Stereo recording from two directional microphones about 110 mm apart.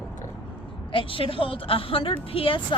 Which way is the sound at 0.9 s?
55° left (ahead or behind).